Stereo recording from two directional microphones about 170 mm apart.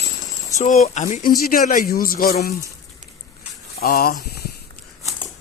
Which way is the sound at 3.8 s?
65° left (ahead or behind).